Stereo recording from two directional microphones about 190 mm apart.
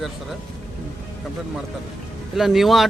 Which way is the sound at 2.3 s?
Centre (ahead or behind).